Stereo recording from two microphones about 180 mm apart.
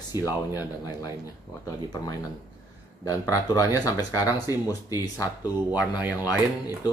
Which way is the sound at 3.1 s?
20° left (ahead or behind).